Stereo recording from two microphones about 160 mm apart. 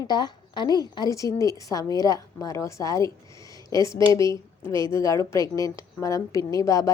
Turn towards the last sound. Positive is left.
turn(degrees=20)  # may be behind; listen again after turning